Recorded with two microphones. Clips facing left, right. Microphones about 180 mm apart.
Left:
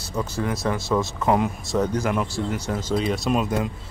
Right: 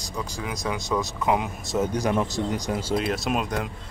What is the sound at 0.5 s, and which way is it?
Speech, 15° right (ahead or behind).